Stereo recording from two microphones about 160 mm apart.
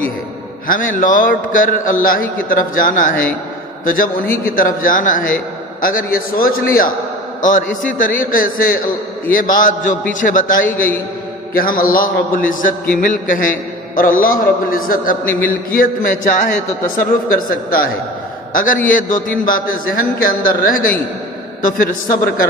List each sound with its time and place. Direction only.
0.7 s a man's voice: 60° left (ahead or behind)